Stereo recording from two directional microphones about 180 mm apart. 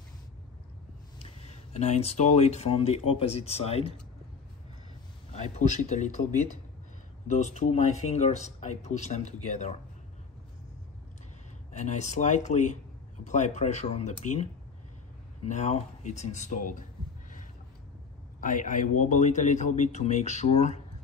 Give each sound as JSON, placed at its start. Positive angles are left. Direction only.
{"t": 1.2, "sound": "speech", "side_deg": 35}
{"t": 5.3, "sound": "speech", "side_deg": 40}
{"t": 7.2, "sound": "speech", "side_deg": 40}
{"t": 11.7, "sound": "speech", "side_deg": 40}
{"t": 18.4, "sound": "speech", "side_deg": 45}